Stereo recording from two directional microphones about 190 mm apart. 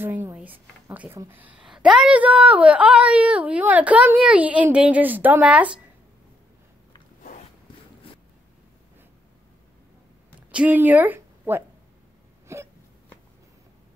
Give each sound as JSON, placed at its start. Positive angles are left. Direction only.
{"t": 0.0, "sound": "a woman's voice", "side_deg": -10}
{"t": 10.5, "sound": "speech", "side_deg": -5}
{"t": 12.5, "sound": "a sound", "side_deg": -15}